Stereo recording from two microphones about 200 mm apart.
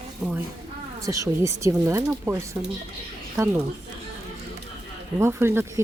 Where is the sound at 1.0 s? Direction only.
15° right (ahead or behind).